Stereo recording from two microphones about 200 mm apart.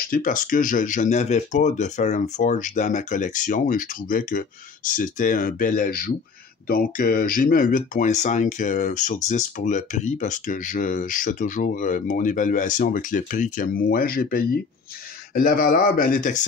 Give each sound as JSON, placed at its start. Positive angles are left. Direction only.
{"t": 0.0, "sound": "speech", "side_deg": 45}